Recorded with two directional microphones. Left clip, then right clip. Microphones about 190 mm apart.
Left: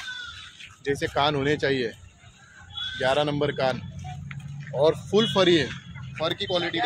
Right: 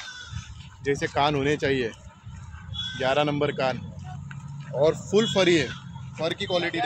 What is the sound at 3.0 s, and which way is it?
Speech, 25° right (ahead or behind).